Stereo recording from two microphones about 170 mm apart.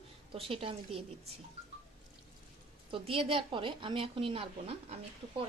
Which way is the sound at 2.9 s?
30° right (ahead or behind).